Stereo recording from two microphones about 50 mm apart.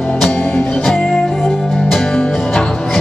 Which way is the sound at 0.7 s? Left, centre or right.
Centre.